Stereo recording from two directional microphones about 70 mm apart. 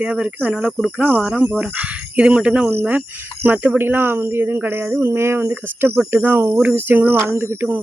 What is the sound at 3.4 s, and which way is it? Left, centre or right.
Cricket, right.